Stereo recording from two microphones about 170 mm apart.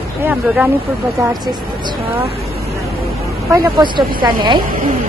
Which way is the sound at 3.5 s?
25° right (ahead or behind).